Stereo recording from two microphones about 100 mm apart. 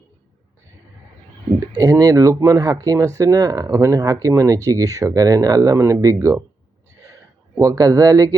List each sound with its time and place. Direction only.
1.7 s speech: 40° right (ahead or behind)
7.6 s speech: 35° right (ahead or behind)